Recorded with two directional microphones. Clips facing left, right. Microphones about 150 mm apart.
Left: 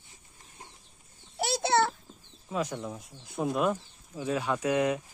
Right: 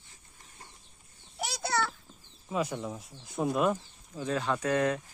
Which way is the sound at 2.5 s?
5° right (ahead or behind).